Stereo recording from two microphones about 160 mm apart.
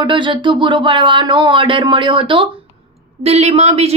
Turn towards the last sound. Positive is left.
turn(degrees=-40)  # may be behind; listen again after turning